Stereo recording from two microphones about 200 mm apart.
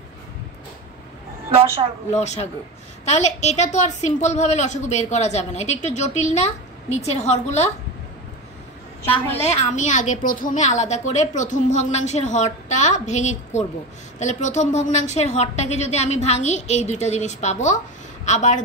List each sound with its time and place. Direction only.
2.1 s a woman's voice: 35° left (ahead or behind)
9.4 s a woman's voice: 35° left (ahead or behind)